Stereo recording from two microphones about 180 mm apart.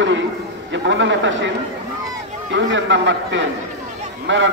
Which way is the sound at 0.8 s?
90° right.